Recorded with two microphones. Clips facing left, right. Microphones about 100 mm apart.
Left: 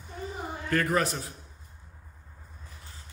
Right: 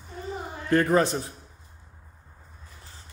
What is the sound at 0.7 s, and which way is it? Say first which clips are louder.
Speech: right 6 dB; 25° right (ahead or behind).